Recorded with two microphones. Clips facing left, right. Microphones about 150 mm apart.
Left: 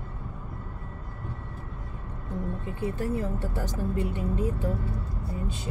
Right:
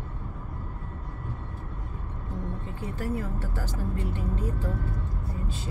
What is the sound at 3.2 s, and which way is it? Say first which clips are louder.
Speech: left 3 dB; 20° left (ahead or behind).